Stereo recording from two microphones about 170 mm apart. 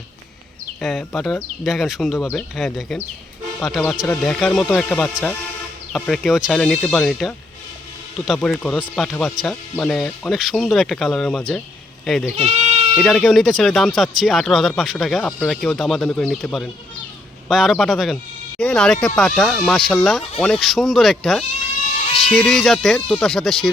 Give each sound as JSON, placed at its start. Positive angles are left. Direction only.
{"t": 0.8, "sound": "speech", "side_deg": 5}
{"t": 12.4, "sound": "bleat", "side_deg": -35}
{"t": 13.0, "sound": "speech", "side_deg": 0}